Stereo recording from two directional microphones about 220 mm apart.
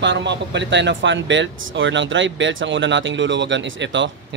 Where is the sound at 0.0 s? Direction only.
55° right (ahead or behind).